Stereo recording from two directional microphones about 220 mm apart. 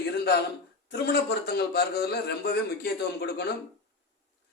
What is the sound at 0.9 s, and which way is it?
A man's voice, 45° left (ahead or behind).